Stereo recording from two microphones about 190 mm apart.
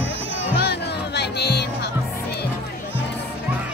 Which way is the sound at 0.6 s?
60° left (ahead or behind).